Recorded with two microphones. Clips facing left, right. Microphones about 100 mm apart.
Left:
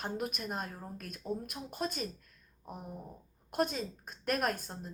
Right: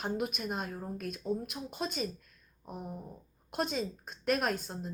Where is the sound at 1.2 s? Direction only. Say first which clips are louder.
Right 3 dB; centre (ahead or behind).